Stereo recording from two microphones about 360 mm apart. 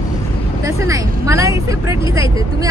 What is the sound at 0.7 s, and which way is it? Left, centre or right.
Speech, centre.